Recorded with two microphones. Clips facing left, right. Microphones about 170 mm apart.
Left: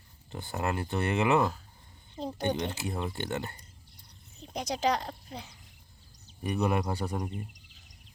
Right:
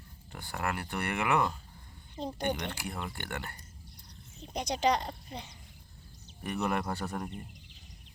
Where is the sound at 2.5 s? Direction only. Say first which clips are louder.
Left 5 dB; 20° left (ahead or behind).